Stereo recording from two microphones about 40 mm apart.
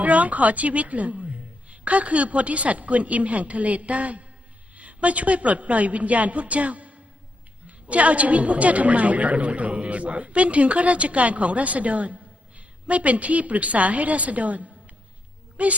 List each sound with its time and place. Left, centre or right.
0.0 s a woman's voice: right